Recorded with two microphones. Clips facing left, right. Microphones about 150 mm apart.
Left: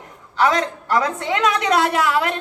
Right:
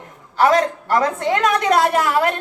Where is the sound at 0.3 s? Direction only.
45° right (ahead or behind).